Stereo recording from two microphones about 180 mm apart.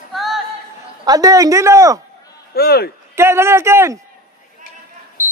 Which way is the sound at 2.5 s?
60° left (ahead or behind).